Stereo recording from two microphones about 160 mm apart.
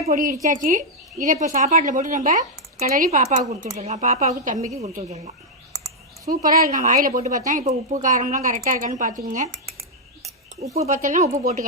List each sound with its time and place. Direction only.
0.1 s a woman's voice: 60° right (ahead or behind)
3.1 s speech: 45° right (ahead or behind)
5.7 s a sound: 25° right (ahead or behind)
6.3 s speech: 60° right (ahead or behind)
10.9 s speech: 55° right (ahead or behind)